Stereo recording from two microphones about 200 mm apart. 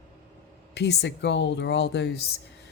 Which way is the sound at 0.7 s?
55° left (ahead or behind).